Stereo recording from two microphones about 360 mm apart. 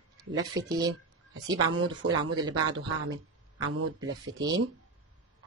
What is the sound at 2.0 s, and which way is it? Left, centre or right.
Speech, right.